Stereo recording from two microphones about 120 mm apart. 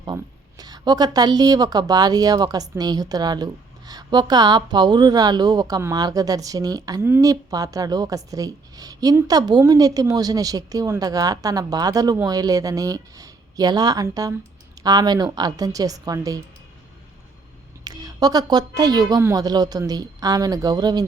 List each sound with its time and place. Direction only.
0.6 s a woman's voice: 35° right (ahead or behind)
17.8 s a woman's voice: 35° right (ahead or behind)